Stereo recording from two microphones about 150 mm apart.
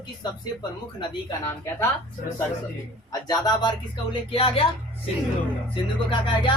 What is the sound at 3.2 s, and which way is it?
Speech, 30° left (ahead or behind).